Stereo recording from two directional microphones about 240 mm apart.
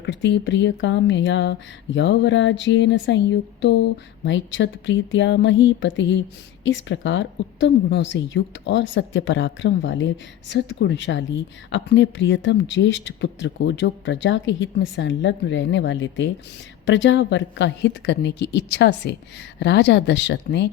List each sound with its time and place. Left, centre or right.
0.0 s speech: left